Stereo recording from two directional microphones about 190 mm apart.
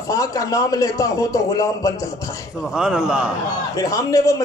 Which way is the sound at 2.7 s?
5° right (ahead or behind).